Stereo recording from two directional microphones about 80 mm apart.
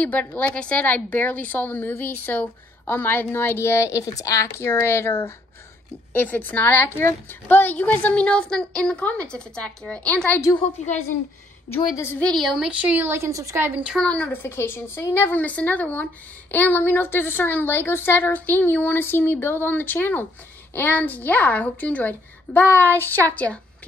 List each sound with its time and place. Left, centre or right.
0.0 s a woman's voice: centre; by 5.3 s left
6.1 s a woman's voice: left
12.4 s speech: centre
12.6 s speech: centre
13.3 s a woman's voice: right
13.6 s speech: right
14.0 s a woman's voice: centre